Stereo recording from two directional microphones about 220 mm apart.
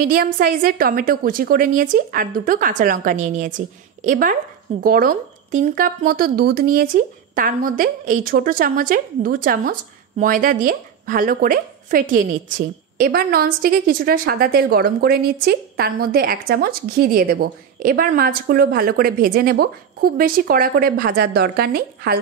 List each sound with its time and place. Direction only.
0.0 s a woman's voice: 40° right (ahead or behind)